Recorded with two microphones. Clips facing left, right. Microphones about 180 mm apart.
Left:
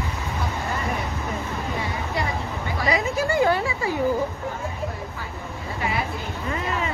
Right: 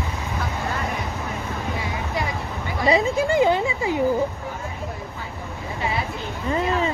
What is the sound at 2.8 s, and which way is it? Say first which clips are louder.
Chatter: right 4 dB; 25° right (ahead or behind).